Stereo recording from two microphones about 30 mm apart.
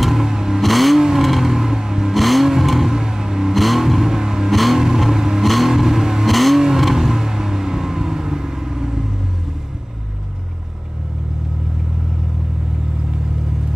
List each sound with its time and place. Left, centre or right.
0.2 s vehicle: centre
0.6 s vehicle: centre
1.5 s vehicle: centre
2.1 s vehicle: centre
2.9 s vehicle: centre
3.5 s vehicle: centre
4.0 s vehicle: centre
4.5 s vehicle: centre
4.7 s vehicle: centre
5.4 s vehicle: centre
5.7 s vehicle: centre
6.2 s vehicle: centre